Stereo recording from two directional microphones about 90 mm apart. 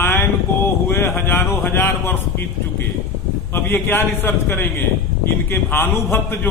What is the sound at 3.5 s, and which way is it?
A man's voice, 25° left (ahead or behind).